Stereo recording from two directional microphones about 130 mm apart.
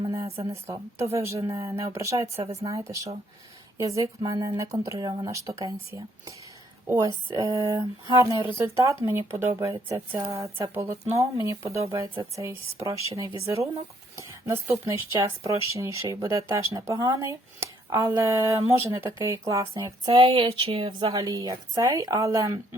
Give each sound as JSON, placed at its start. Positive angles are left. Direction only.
{"t": 0.0, "sound": "a sound", "side_deg": -30}
{"t": 0.5, "sound": "speech", "side_deg": -20}
{"t": 20.1, "sound": "speech", "side_deg": -45}
{"t": 21.1, "sound": "speech", "side_deg": -25}